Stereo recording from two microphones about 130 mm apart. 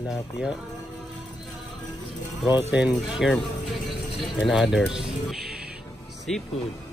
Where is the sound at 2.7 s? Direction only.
10° right (ahead or behind).